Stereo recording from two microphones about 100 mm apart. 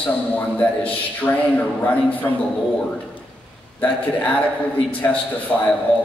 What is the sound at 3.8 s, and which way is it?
A man's voice, 15° left (ahead or behind).